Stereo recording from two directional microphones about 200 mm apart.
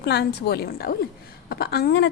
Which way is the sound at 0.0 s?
55° left (ahead or behind).